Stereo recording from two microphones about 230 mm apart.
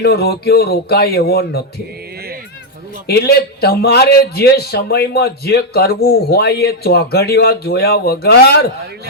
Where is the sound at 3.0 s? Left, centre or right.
Left.